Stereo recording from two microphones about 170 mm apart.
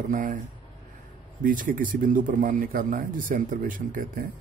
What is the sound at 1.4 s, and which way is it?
A man's voice, 50° right (ahead or behind).